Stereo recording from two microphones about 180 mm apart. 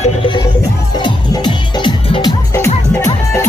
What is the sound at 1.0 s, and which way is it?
Music, 25° left (ahead or behind).